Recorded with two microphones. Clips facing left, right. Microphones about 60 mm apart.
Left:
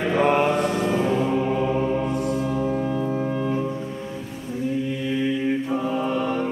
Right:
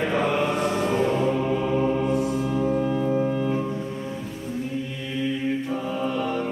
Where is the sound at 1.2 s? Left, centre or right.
Centre.